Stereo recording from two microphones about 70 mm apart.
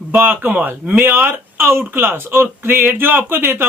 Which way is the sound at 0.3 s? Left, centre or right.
Right.